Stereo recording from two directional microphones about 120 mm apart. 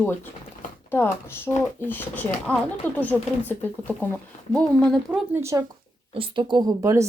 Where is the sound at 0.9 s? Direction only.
15° left (ahead or behind).